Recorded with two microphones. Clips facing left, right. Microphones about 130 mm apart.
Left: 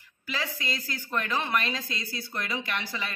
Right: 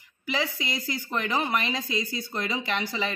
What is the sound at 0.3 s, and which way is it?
A woman's voice, 15° right (ahead or behind).